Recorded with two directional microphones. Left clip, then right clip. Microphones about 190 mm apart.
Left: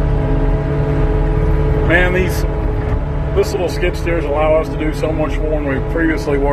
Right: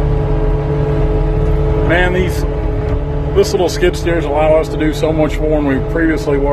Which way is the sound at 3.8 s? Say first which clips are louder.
Right 4 dB; 20° right (ahead or behind).